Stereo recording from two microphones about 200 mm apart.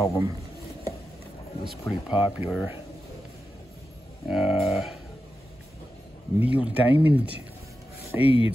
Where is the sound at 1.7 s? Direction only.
Centre (ahead or behind).